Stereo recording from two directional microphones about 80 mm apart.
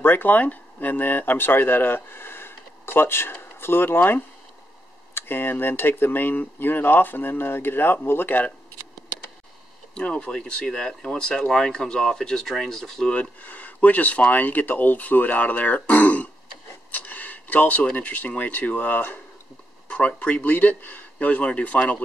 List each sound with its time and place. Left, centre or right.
0.0 s speech: left
9.9 s speech: centre
13.1 s speech: centre